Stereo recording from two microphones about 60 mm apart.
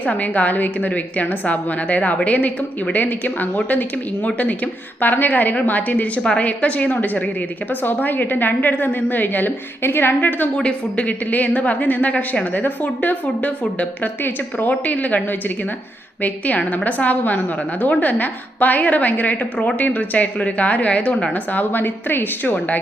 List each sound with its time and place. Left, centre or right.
0.0 s a woman's voice: left
10.6 s a woman's voice: centre